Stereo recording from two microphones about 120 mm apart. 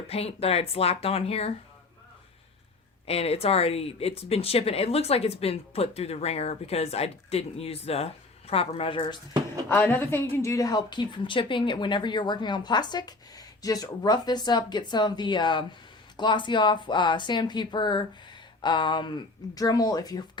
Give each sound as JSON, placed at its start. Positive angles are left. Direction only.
{"t": 0.1, "sound": "speech", "side_deg": 55}
{"t": 3.1, "sound": "speech", "side_deg": 55}
{"t": 9.6, "sound": "a woman's voice", "side_deg": 15}